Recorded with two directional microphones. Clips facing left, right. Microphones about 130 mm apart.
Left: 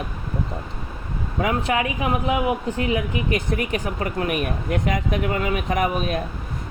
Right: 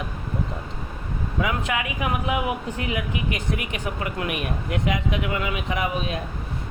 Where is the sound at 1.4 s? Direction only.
35° left (ahead or behind).